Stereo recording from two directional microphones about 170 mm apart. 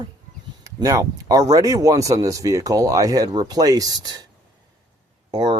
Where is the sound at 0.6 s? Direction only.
20° right (ahead or behind).